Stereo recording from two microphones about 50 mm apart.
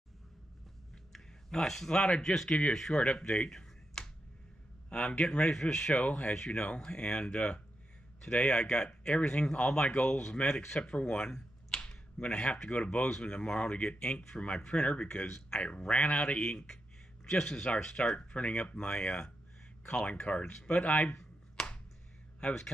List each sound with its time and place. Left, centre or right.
1.1 s speech: centre
3.1 s a sound: centre
4.8 s speech: centre
6.0 s speech: left
6.3 s speech: centre
6.6 s speech: left
11.0 s a sound: centre
12.6 s speech: left
15.6 s speech: left
21.2 s finger snapping: centre